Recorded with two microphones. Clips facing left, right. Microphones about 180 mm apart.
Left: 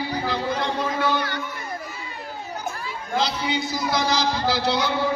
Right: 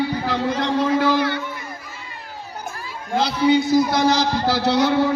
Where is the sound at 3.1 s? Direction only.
55° right (ahead or behind).